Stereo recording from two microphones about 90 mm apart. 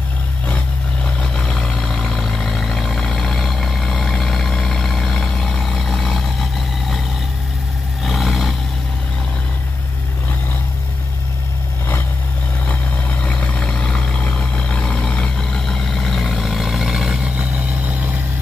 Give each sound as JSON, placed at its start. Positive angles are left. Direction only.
{"t": 1.2, "sound": "vehicle", "side_deg": 10}
{"t": 8.0, "sound": "vehicle", "side_deg": 0}
{"t": 13.2, "sound": "vehicle", "side_deg": 10}
{"t": 17.4, "sound": "vehicle", "side_deg": -20}